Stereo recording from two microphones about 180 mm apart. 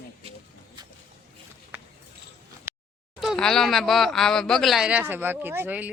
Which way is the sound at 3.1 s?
Centre (ahead or behind).